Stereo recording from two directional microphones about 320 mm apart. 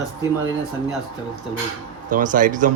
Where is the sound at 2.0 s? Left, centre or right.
Right.